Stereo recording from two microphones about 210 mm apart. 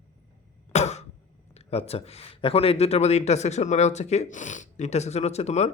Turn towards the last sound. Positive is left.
turn(degrees=30)  # may be behind; listen again after turning